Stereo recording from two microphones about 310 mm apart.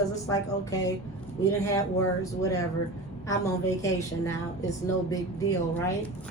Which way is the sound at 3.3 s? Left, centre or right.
Centre.